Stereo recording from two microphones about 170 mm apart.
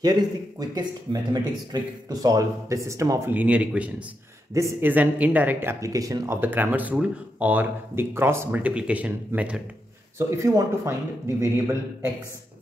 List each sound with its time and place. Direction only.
0.0 s speech: 25° right (ahead or behind)